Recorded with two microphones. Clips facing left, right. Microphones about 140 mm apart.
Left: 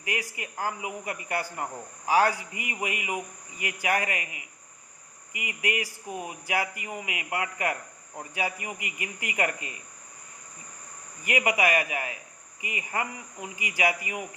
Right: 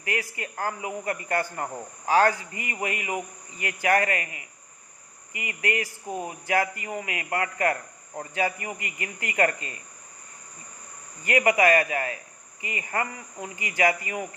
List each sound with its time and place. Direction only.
0.0 s speech: 15° left (ahead or behind)
11.2 s speech: 15° left (ahead or behind)